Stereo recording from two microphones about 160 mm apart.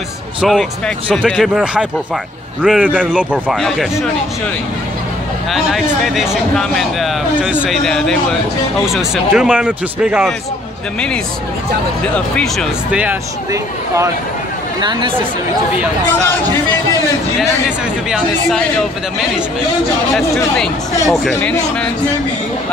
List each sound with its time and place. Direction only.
0.4 s a man's voice: centre (ahead or behind)
5.5 s speech: centre (ahead or behind)
12.9 s a man's voice: 10° right (ahead or behind); by 15.1 s 30° right (ahead or behind)
17.4 s speech: centre (ahead or behind)
20.2 s speech: centre (ahead or behind)